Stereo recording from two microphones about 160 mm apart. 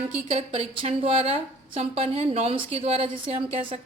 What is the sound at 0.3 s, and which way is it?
A woman's voice, 40° right (ahead or behind).